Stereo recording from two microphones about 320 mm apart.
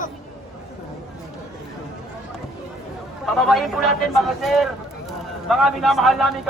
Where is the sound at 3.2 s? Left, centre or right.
Centre.